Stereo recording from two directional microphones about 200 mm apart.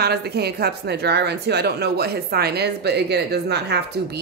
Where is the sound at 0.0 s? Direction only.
55° right (ahead or behind).